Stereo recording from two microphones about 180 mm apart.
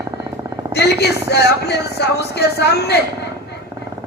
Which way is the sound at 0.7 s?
65° left (ahead or behind).